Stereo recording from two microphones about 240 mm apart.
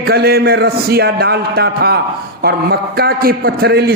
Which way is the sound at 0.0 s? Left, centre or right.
Right.